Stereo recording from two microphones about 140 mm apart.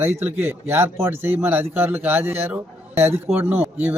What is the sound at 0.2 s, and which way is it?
A man's voice, 15° right (ahead or behind).